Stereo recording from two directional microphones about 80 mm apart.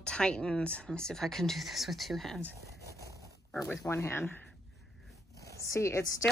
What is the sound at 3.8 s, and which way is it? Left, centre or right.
Speech, left.